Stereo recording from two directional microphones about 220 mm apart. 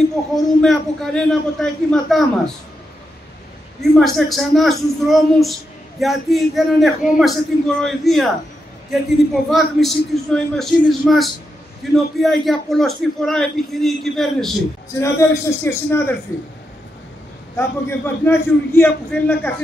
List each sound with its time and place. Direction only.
0.6 s a woman's voice: 5° left (ahead or behind)
3.9 s a woman's voice: centre (ahead or behind)
9.3 s a woman's voice: centre (ahead or behind)
15.0 s a man's voice: 10° left (ahead or behind)
17.6 s a man's voice: 10° left (ahead or behind)